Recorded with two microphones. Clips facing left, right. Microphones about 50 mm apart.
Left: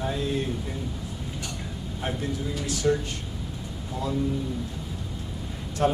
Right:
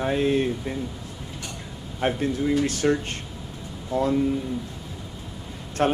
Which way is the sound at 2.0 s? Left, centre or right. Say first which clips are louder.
Right 7 dB; right.